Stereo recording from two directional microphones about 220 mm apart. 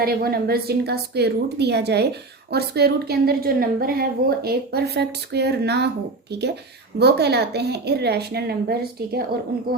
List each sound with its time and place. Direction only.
0.0 s a woman's voice: 45° right (ahead or behind)
7.0 s a woman's voice: 50° right (ahead or behind)